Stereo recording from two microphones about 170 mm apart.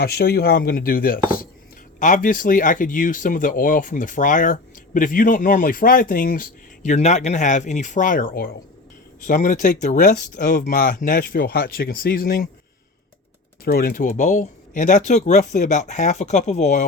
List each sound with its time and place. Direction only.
0.0 s speech: 65° left (ahead or behind)
13.7 s speech: 60° left (ahead or behind); by 16.8 s 40° left (ahead or behind)